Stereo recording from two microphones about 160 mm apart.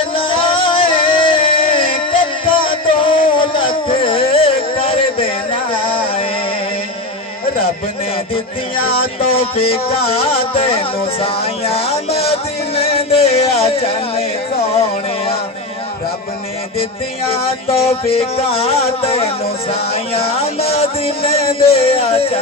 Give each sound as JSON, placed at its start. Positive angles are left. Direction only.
{"t": 0.1, "sound": "music", "side_deg": 35}
{"t": 9.2, "sound": "music", "side_deg": 35}
{"t": 17.2, "sound": "music", "side_deg": 40}